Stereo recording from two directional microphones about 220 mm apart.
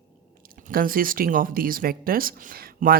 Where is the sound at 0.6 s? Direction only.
40° right (ahead or behind).